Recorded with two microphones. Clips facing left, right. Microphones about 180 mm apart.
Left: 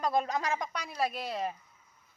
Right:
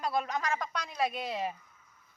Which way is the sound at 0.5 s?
15° left (ahead or behind).